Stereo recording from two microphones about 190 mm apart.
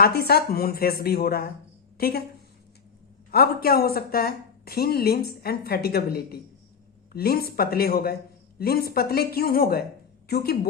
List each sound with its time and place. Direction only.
0.0 s a woman's voice: 55° left (ahead or behind)
3.3 s a woman's voice: 55° left (ahead or behind)